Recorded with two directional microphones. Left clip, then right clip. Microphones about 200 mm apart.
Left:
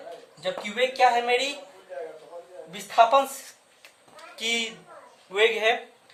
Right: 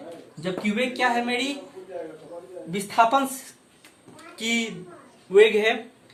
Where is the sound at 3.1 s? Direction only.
25° left (ahead or behind).